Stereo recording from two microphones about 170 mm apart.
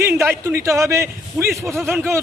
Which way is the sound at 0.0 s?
15° right (ahead or behind).